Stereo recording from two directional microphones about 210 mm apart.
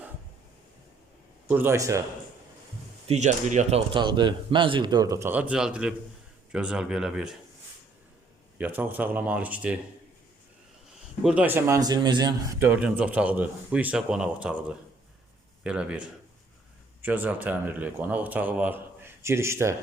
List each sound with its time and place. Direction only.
1.5 s speech: 10° right (ahead or behind)
3.1 s speech: 35° right (ahead or behind); by 7.3 s centre (ahead or behind)
8.5 s speech: 10° right (ahead or behind)
11.2 s speech: 5° right (ahead or behind)